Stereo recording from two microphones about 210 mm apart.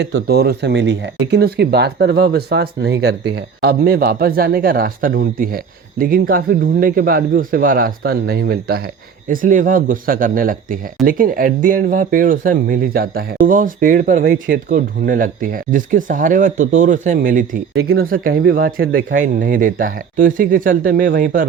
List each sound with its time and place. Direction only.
0.3 s speech: 50° right (ahead or behind)